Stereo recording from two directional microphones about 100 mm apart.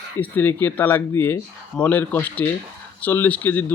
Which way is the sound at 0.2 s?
20° left (ahead or behind).